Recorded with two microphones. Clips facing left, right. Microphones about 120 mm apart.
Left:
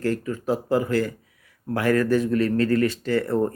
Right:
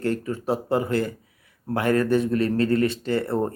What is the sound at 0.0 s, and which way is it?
Speech, 25° right (ahead or behind).